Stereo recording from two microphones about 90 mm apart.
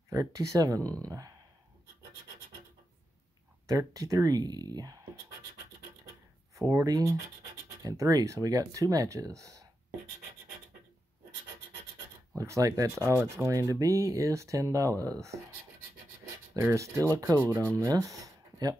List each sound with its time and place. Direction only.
0.1 s speech: 40° right (ahead or behind)
3.6 s speech: 40° right (ahead or behind)
6.5 s speech: 35° right (ahead or behind)
12.4 s speech: 35° right (ahead or behind)
16.5 s speech: 35° right (ahead or behind)